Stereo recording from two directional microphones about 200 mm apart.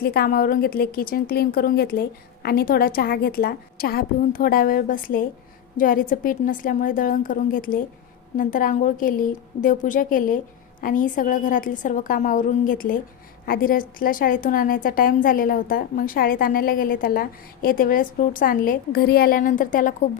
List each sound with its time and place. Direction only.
0.0 s a woman's voice: 50° left (ahead or behind)